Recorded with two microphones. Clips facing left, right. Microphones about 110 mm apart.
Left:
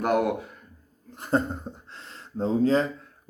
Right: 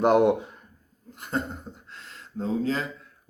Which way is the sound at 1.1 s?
35° left (ahead or behind).